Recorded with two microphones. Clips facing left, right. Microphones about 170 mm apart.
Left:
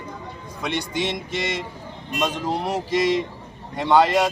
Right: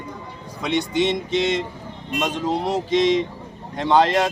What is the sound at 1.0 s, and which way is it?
Speech, 5° left (ahead or behind).